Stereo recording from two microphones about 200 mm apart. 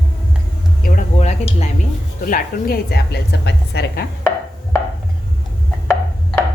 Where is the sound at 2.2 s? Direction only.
45° left (ahead or behind).